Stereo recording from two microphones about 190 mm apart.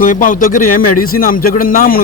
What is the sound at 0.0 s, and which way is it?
Speech, 45° left (ahead or behind).